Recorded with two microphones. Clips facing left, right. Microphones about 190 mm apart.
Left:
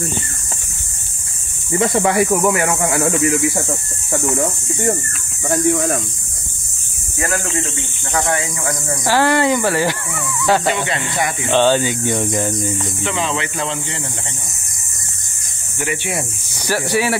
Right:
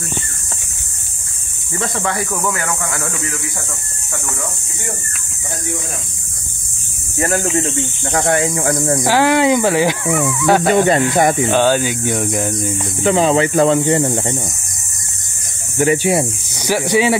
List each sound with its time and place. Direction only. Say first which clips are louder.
1.8 s speech: left 6 dB; 20° left (ahead or behind)
5.5 s speech: left 10 dB; 60° left (ahead or behind)
7.2 s speech: right 4 dB; 30° right (ahead or behind)
9.0 s speech: right 1 dB; 15° right (ahead or behind)
10.0 s a sound: right 10 dB; 80° right
10.4 s speech: right 1 dB; 10° right (ahead or behind)
10.7 s speech: right 9 dB; 45° right (ahead or behind)
11.5 s speech: even; 10° right (ahead or behind)
13.0 s speech: right 11 dB; 40° right (ahead or behind)
15.8 s speech: right 9 dB; 40° right (ahead or behind)
16.6 s speech: right 4 dB; 15° right (ahead or behind)